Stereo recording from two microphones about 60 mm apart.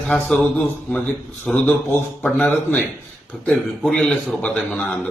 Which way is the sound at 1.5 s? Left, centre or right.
Centre.